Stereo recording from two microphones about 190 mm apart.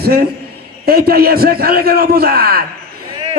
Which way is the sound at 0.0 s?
55° right (ahead or behind).